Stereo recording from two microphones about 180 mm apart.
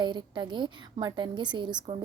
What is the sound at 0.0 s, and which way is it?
A woman's voice, 25° right (ahead or behind).